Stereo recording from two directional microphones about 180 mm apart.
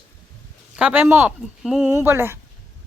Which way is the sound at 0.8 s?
5° right (ahead or behind).